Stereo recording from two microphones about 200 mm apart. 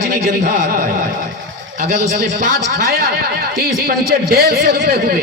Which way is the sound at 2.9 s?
50° right (ahead or behind).